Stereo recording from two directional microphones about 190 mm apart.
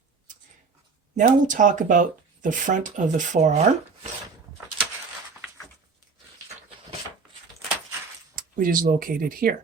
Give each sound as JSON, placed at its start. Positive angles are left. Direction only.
{"t": 1.1, "sound": "speech", "side_deg": -45}
{"t": 8.4, "sound": "speech", "side_deg": -45}